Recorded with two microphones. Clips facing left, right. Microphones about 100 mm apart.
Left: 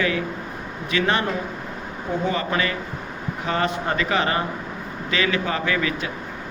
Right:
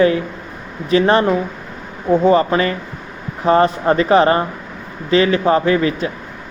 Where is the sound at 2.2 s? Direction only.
35° right (ahead or behind).